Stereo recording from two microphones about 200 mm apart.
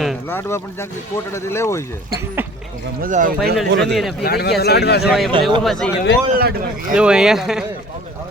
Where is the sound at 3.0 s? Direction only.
40° right (ahead or behind).